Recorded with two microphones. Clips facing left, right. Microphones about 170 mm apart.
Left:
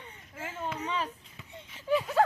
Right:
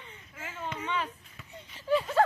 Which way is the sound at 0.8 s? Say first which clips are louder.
Right 1 dB; 30° left (ahead or behind).